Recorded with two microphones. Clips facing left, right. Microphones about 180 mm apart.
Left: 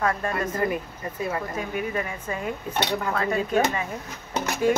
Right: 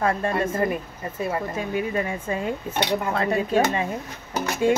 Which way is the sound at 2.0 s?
30° right (ahead or behind).